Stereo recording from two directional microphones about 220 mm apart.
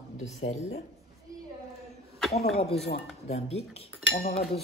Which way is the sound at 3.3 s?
30° left (ahead or behind).